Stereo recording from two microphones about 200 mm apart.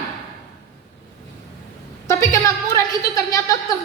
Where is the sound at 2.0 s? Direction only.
15° left (ahead or behind).